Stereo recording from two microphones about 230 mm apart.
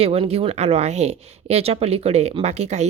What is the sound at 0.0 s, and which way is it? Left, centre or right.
Speech, right.